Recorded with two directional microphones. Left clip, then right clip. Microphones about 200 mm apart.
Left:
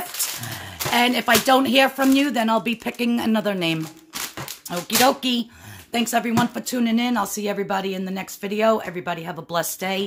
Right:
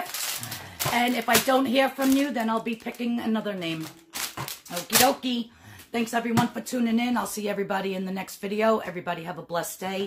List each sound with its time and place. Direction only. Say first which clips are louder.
0.9 s speech: left 5 dB; 50° left (ahead or behind)
5.2 s speech: left 6 dB; 55° left (ahead or behind)
6.7 s speech: left 4 dB; 40° left (ahead or behind)